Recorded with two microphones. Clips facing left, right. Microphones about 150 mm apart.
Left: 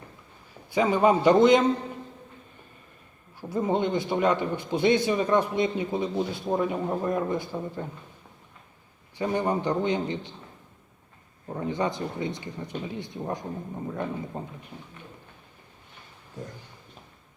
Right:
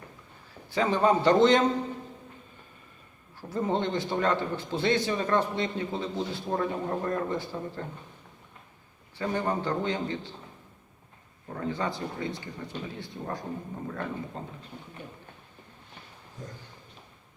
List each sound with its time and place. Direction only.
0.7 s a man's voice: 15° left (ahead or behind)
3.5 s a man's voice: 10° left (ahead or behind)
9.1 s a man's voice: 15° left (ahead or behind)
11.4 s a man's voice: 20° left (ahead or behind)